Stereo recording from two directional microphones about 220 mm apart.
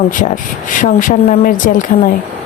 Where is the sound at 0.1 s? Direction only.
35° left (ahead or behind).